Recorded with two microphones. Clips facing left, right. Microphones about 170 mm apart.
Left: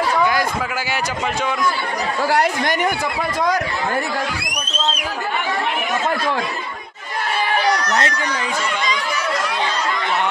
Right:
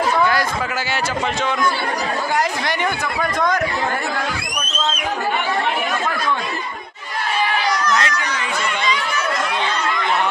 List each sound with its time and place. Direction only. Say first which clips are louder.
7.9 s a child's voice: even; 35° left (ahead or behind)